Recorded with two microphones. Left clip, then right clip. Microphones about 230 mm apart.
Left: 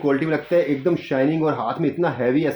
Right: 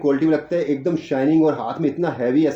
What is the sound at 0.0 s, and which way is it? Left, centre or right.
Speech, left.